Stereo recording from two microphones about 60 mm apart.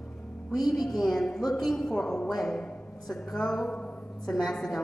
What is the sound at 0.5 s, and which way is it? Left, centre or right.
Speech, left.